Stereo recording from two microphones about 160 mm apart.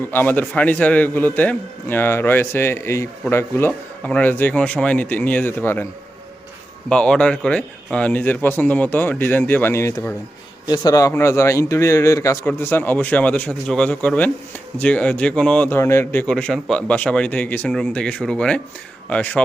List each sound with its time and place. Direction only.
0.1 s a man's voice: 10° left (ahead or behind)
6.9 s a man's voice: 5° left (ahead or behind)
16.2 s a man's voice: 5° left (ahead or behind)